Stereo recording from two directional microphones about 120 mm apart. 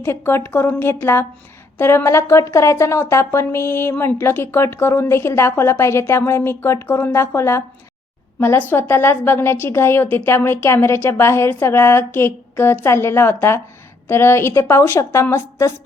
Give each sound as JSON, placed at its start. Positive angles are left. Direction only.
{"t": 0.0, "sound": "speech", "side_deg": 20}